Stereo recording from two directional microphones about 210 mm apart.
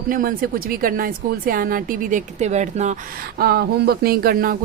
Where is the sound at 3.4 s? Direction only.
50° right (ahead or behind).